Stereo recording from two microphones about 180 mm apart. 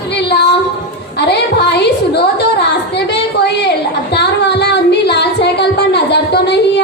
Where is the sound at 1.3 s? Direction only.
70° left (ahead or behind).